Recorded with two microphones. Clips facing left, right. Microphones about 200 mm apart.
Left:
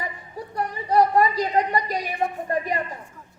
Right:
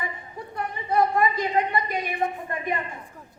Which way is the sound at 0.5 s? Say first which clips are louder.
Left 4 dB; 35° left (ahead or behind).